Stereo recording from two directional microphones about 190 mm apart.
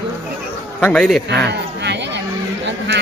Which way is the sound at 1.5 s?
65° right (ahead or behind).